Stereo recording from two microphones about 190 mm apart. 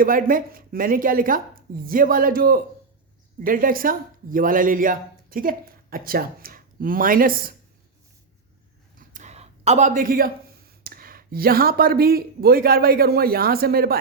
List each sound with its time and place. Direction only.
0.0 s a woman's voice: 45° right (ahead or behind)
9.0 s speech: 40° right (ahead or behind)